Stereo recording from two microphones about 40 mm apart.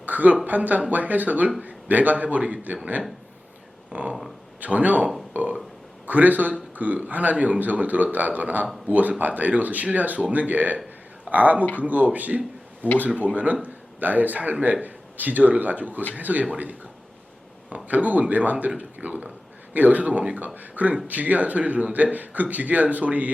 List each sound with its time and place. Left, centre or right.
0.0 s a sound: right
0.4 s a man's voice: right
3.9 s a man's voice: right
5.3 s burping: right
6.1 s a man's voice: right
17.8 s a man's voice: right